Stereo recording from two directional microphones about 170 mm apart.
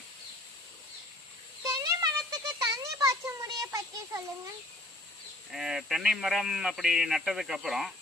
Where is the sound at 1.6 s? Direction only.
20° right (ahead or behind).